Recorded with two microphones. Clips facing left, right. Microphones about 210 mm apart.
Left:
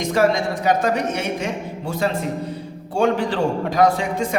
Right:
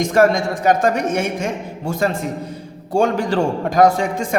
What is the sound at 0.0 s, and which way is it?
A man's voice, 50° right (ahead or behind).